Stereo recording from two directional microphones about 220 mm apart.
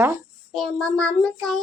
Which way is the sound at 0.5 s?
Centre (ahead or behind).